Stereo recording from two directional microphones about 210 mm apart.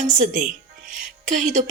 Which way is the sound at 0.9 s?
35° right (ahead or behind).